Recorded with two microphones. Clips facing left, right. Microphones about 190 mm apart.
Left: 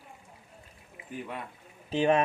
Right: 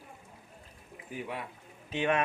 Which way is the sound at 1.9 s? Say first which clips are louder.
Left 5 dB; 35° left (ahead or behind).